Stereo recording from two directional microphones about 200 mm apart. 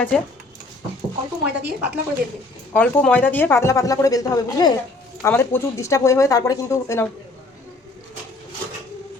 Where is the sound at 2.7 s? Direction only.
10° left (ahead or behind).